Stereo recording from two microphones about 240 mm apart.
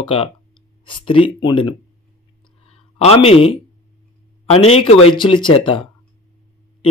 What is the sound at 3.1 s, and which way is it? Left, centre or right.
Speech, left.